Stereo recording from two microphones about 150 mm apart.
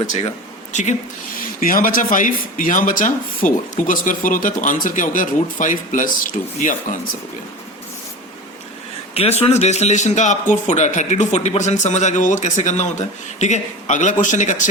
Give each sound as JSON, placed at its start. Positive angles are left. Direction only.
{"t": 0.7, "sound": "speech", "side_deg": 50}
{"t": 1.5, "sound": "speech", "side_deg": 70}
{"t": 9.1, "sound": "a man's voice", "side_deg": 40}